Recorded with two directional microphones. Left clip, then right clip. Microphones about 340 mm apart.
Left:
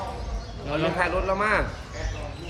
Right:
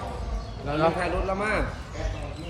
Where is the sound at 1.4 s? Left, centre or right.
Centre.